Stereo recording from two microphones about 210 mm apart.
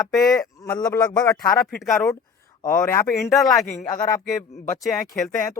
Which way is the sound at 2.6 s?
15° left (ahead or behind).